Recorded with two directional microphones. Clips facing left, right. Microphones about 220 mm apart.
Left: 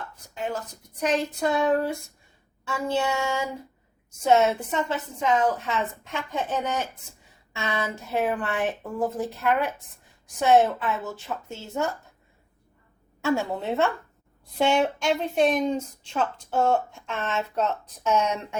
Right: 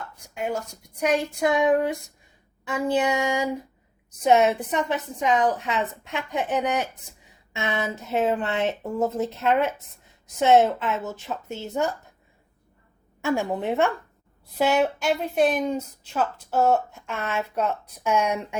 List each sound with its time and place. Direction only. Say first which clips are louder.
0.3 s a woman's voice: right 2 dB; 10° right (ahead or behind)
13.2 s a woman's voice: right 1 dB; 15° right (ahead or behind)
14.6 s a woman's voice: right 1 dB; 5° right (ahead or behind)